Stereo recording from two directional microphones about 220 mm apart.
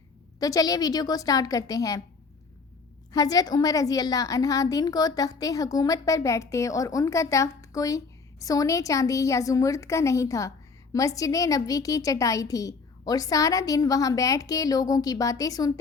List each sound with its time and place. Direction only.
0.3 s a woman's voice: 15° left (ahead or behind)
3.1 s a woman's voice: 15° left (ahead or behind)